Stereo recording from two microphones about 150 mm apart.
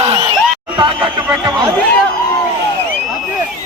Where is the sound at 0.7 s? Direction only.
35° right (ahead or behind).